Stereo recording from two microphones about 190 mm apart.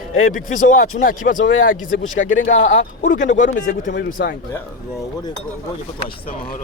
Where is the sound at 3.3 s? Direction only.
40° left (ahead or behind).